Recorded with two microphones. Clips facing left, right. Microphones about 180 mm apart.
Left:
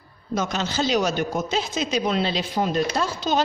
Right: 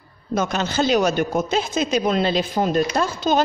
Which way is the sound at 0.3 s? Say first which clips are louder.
Right 3 dB; 55° right (ahead or behind).